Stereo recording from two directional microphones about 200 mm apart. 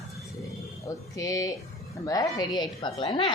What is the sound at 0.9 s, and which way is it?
A woman's voice, 15° left (ahead or behind).